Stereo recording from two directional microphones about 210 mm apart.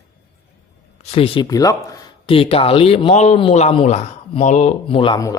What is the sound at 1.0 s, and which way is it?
Speech, 30° left (ahead or behind).